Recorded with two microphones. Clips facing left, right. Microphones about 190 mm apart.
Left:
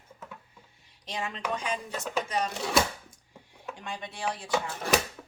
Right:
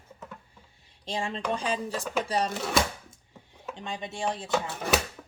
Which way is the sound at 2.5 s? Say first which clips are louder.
Even; centre (ahead or behind).